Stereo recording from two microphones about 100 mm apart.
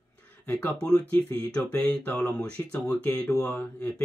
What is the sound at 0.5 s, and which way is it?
Speech, 15° left (ahead or behind).